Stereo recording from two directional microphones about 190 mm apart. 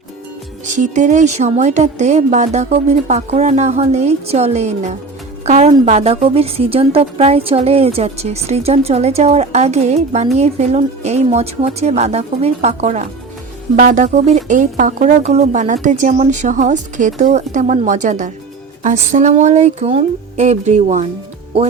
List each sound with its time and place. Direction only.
0.6 s speech: 40° right (ahead or behind)
5.5 s music: 40° right (ahead or behind)
5.8 s speech: 35° right (ahead or behind)